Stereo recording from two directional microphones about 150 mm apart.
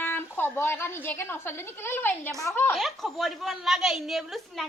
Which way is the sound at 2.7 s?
Centre (ahead or behind).